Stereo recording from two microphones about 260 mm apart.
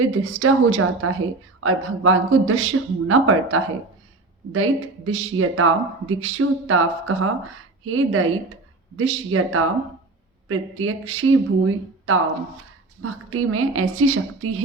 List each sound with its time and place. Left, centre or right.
0.0 s speech: right